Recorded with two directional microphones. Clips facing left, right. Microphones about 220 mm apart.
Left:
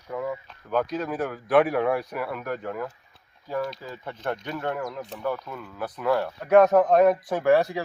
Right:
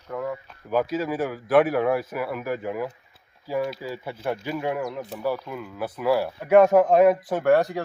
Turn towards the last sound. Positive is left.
turn(degrees=0)  # may be behind; listen again after turning